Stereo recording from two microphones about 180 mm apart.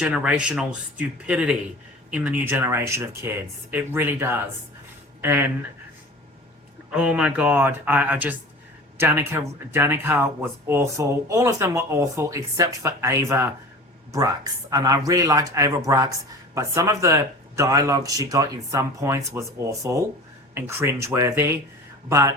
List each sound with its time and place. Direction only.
0.0 s speech: 5° right (ahead or behind)
6.9 s speech: 5° right (ahead or behind)